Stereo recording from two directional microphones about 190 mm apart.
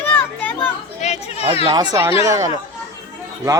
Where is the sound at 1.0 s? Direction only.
35° left (ahead or behind).